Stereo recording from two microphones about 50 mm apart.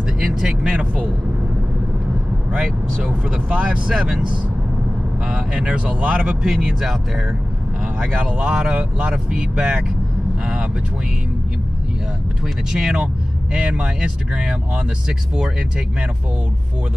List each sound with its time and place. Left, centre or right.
0.0 s speech: centre
2.5 s speech: centre
3.9 s speech: centre
5.3 s speech: centre
6.4 s speech: centre
8.0 s speech: centre
12.7 s speech: centre